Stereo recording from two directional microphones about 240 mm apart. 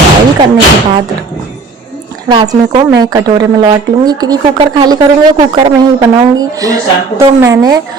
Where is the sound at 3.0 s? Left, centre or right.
Centre.